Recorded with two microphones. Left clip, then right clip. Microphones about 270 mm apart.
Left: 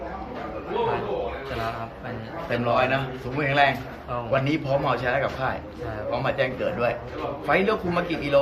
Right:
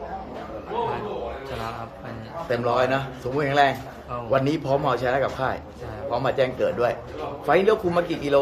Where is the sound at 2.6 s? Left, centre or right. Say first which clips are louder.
Even; right.